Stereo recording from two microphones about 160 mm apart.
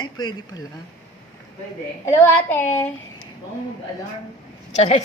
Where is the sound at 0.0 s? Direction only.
25° left (ahead or behind).